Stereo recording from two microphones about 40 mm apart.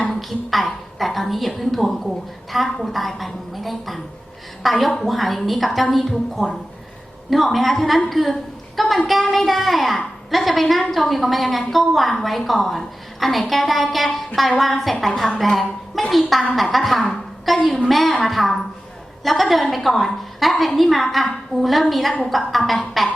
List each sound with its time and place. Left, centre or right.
0.1 s a woman's voice: centre